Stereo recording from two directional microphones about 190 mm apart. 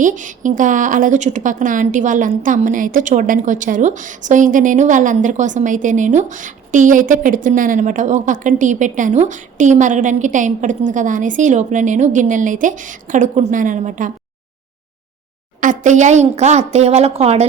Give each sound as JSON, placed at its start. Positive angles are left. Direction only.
{"t": 0.0, "sound": "a woman's voice", "side_deg": -40}
{"t": 15.6, "sound": "a woman's voice", "side_deg": -40}